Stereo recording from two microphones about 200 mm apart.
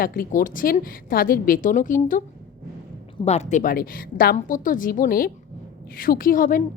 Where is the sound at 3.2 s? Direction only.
35° left (ahead or behind).